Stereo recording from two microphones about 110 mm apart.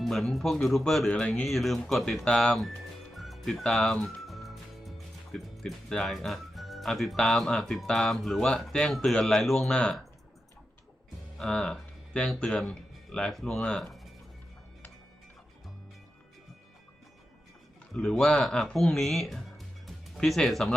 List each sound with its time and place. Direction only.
0.0 s speech: centre (ahead or behind)
11.3 s speech: 5° left (ahead or behind)
17.9 s speech: 5° left (ahead or behind)